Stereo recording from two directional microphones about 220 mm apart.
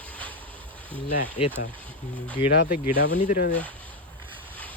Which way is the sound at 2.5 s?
45° left (ahead or behind).